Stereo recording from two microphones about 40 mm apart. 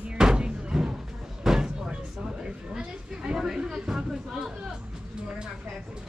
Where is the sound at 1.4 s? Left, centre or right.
Centre.